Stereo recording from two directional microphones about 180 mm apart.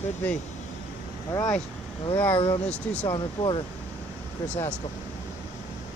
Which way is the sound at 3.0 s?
25° left (ahead or behind).